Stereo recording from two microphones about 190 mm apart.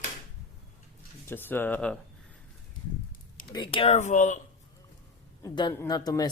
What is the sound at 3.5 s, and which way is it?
Speech, 25° left (ahead or behind).